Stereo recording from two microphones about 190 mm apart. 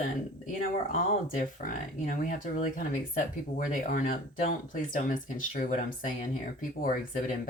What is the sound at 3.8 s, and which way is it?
Speech, 40° left (ahead or behind).